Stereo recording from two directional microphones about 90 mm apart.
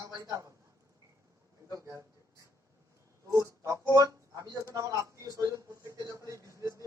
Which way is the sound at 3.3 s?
35° right (ahead or behind).